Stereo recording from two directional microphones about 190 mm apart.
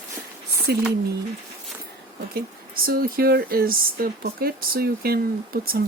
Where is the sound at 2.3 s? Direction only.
50° right (ahead or behind).